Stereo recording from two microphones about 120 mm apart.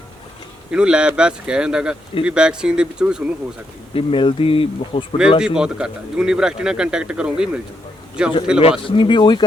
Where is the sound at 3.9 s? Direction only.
50° left (ahead or behind).